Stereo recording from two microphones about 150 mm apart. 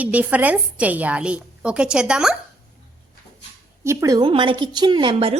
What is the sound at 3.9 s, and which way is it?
Speech, 20° right (ahead or behind).